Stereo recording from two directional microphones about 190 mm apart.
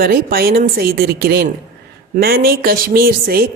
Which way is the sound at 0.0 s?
50° right (ahead or behind).